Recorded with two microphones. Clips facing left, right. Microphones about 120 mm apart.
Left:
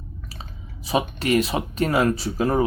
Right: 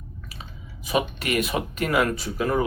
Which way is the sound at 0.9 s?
30° left (ahead or behind).